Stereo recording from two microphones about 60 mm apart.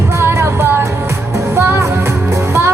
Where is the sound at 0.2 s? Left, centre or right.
Right.